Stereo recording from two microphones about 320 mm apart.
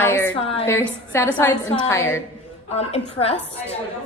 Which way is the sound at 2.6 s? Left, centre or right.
Centre.